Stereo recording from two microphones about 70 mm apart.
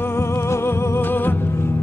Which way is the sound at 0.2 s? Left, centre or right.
Left.